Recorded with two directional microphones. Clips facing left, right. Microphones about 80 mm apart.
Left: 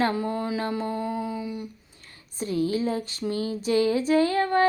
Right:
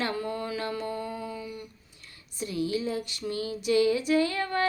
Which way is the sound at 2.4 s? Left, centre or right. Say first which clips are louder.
Left 4 dB; left.